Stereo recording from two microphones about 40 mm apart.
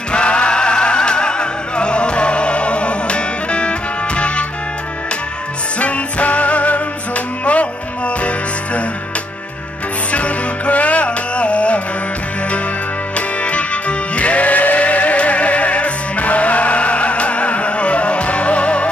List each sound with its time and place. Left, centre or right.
0.1 s music: left
5.8 s music: left
10.1 s music: left
13.1 s music: left